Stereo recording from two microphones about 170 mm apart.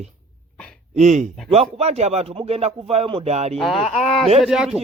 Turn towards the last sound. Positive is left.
turn(degrees=-5)  # may be behind; listen again after turning